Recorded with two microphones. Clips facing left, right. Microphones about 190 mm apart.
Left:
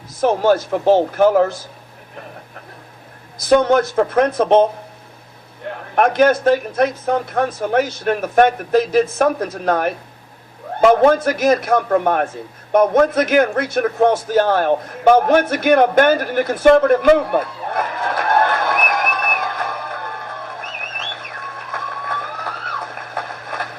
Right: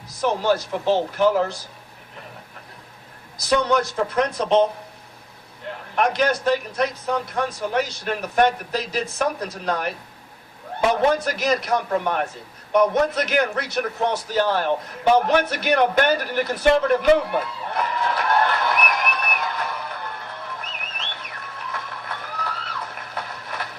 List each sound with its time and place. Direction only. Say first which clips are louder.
0.2 s speech: left 6 dB; 50° left (ahead or behind)
3.5 s speech: left 7 dB; 50° left (ahead or behind)
5.9 s speech: left 7 dB; 50° left (ahead or behind)
12.7 s a sound: left 5 dB; 50° left (ahead or behind)